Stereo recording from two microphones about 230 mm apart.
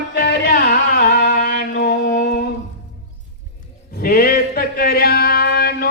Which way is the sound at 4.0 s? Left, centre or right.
Left.